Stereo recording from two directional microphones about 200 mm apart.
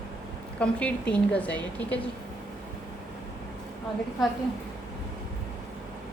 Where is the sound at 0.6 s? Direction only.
5° left (ahead or behind).